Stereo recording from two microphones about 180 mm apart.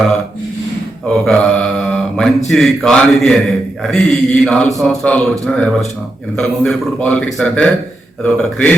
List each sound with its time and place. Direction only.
1.2 s mantra: 5° left (ahead or behind)
2.5 s a man's voice: centre (ahead or behind)